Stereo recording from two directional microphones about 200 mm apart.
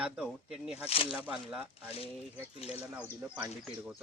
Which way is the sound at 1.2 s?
5° right (ahead or behind).